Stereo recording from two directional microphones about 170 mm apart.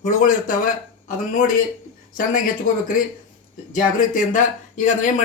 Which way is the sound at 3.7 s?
50° left (ahead or behind).